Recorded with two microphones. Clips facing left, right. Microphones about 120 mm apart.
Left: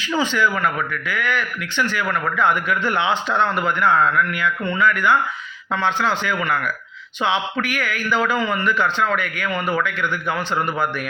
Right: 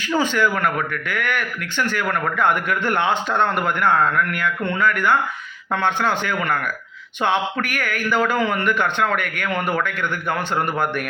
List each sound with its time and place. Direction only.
0.2 s speech: 50° right (ahead or behind)